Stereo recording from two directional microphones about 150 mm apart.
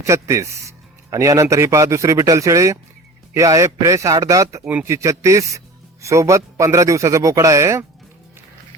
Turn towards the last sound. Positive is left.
turn(degrees=-20)  # may be behind; listen again after turning